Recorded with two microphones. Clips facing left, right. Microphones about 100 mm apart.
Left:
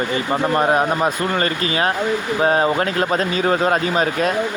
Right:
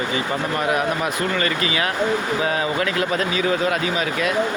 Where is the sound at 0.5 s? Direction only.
35° left (ahead or behind).